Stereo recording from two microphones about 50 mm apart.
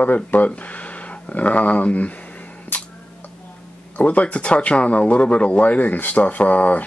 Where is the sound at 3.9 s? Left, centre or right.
Left.